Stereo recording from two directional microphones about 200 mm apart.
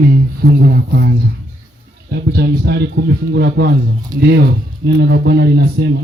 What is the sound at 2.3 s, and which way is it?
A man's voice, 55° right (ahead or behind).